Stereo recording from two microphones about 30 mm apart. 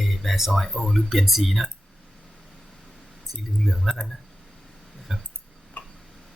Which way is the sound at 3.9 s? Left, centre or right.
Right.